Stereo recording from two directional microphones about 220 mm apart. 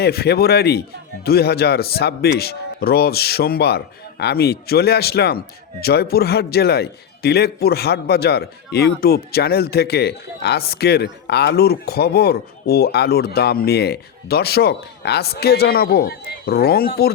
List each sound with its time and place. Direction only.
0.0 s a man's voice: 45° left (ahead or behind)